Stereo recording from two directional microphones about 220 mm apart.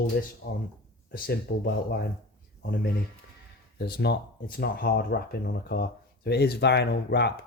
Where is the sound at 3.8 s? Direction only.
45° left (ahead or behind).